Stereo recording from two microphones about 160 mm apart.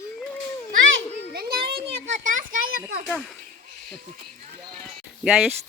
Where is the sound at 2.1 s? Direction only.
50° right (ahead or behind).